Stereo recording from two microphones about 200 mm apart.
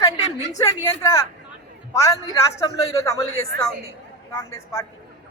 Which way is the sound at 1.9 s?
15° left (ahead or behind).